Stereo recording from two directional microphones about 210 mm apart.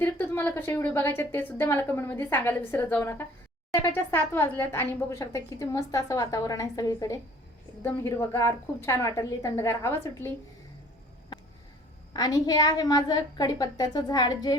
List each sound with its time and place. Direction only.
0.0 s speech: 10° left (ahead or behind)
12.1 s a woman's voice: 20° left (ahead or behind)